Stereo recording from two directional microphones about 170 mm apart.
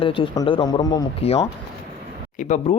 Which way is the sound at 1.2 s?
35° left (ahead or behind).